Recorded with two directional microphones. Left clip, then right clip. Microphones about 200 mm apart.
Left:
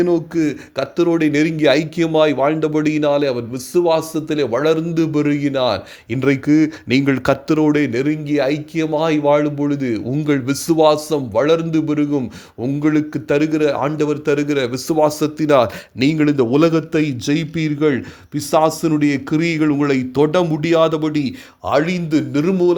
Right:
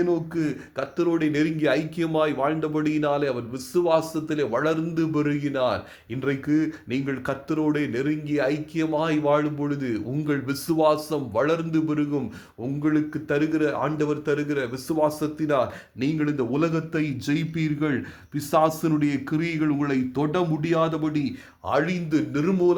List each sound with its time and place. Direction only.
0.0 s speech: 35° left (ahead or behind)